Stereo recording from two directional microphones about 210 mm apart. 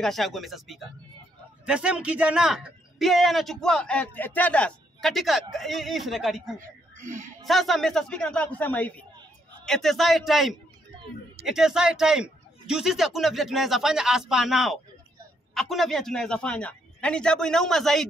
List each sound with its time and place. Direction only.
0.0 s a man's voice: centre (ahead or behind)
7.0 s speech: 35° right (ahead or behind)
7.4 s a man's voice: centre (ahead or behind)